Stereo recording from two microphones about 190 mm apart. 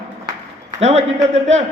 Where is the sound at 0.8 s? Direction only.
35° right (ahead or behind).